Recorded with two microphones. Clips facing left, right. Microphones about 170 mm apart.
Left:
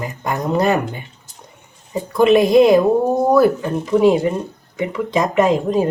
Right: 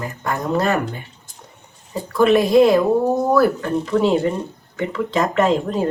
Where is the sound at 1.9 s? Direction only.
15° left (ahead or behind).